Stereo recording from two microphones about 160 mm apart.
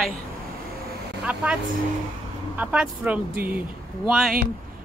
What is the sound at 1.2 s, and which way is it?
Speech, 10° right (ahead or behind).